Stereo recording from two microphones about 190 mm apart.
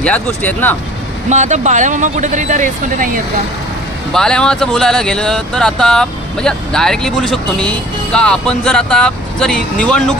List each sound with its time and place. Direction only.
0.0 s speech: 10° left (ahead or behind)
1.3 s speech: 40° right (ahead or behind)
4.1 s speech: 5° left (ahead or behind)